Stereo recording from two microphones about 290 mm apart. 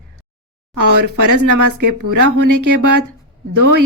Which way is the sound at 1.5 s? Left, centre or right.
Right.